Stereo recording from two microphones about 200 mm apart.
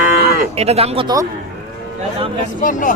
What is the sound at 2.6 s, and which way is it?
Speech, 40° left (ahead or behind).